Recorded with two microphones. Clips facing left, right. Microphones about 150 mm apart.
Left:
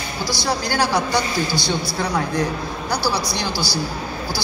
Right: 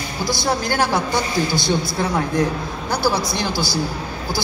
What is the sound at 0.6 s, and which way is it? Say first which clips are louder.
Speech: even; 50° right (ahead or behind).